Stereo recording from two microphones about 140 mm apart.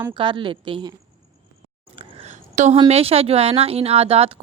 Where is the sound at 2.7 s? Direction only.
45° right (ahead or behind).